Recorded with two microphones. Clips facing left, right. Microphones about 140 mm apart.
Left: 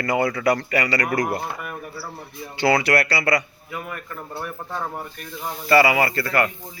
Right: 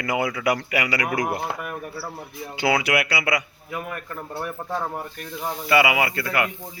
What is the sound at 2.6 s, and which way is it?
Speech, 5° right (ahead or behind).